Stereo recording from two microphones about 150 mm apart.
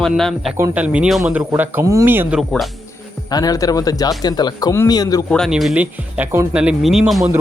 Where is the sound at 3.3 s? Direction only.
25° left (ahead or behind).